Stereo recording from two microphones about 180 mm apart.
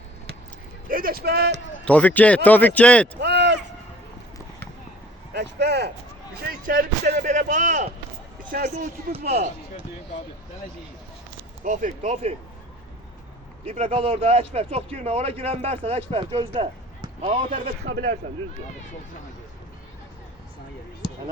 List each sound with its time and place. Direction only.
0.9 s speech: 55° right (ahead or behind); by 1.6 s 70° right (ahead or behind)
1.8 s a man's voice: 10° left (ahead or behind)
3.2 s a sound: 70° right (ahead or behind)
5.3 s speech: 70° right (ahead or behind)
6.4 s speech: 55° right (ahead or behind)
9.3 s speech: 35° right (ahead or behind)
11.6 s speech: 45° right (ahead or behind)
13.7 s speech: 35° right (ahead or behind)
17.5 s speech: 60° right (ahead or behind)